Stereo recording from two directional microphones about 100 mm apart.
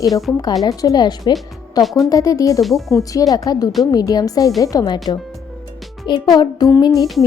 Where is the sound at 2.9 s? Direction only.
35° left (ahead or behind).